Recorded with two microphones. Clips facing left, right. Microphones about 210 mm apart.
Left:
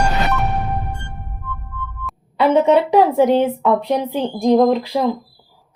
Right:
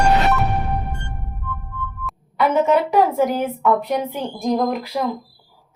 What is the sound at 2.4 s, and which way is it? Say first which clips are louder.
Speech: left 3 dB; 30° left (ahead or behind).